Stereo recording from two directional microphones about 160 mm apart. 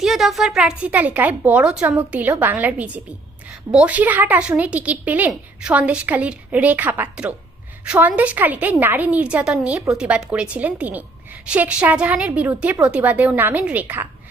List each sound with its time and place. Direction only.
0.0 s a woman's voice: centre (ahead or behind)